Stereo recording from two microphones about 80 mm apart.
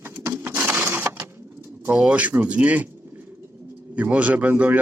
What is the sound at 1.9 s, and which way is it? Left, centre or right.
Speech, centre.